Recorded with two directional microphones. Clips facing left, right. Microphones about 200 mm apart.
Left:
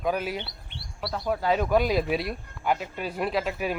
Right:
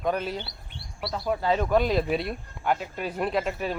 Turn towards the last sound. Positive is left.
turn(degrees=0)  # may be behind; listen again after turning